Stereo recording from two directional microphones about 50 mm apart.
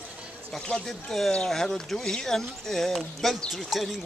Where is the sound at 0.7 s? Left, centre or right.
Centre.